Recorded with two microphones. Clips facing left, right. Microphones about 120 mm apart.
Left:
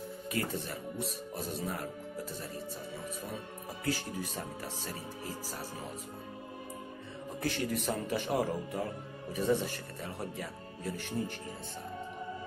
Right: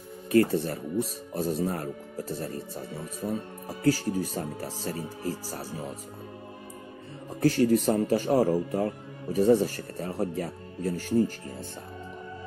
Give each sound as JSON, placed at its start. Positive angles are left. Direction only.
{"t": 0.3, "sound": "speech", "side_deg": -40}
{"t": 3.8, "sound": "speech", "side_deg": -40}
{"t": 7.3, "sound": "speech", "side_deg": -35}